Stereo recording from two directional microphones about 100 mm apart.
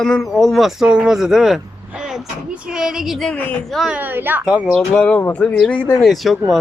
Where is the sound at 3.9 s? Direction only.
20° right (ahead or behind).